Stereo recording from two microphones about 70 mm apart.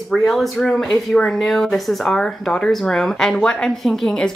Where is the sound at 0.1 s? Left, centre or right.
Centre.